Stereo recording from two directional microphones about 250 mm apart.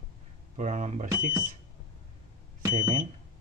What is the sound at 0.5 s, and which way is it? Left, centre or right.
Speech, right.